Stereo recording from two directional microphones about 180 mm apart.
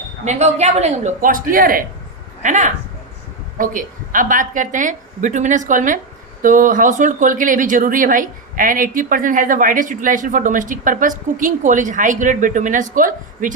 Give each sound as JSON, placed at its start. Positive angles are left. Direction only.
{"t": 0.3, "sound": "speech", "side_deg": -40}